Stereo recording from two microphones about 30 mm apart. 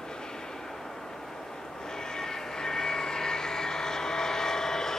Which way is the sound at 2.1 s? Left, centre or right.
Left.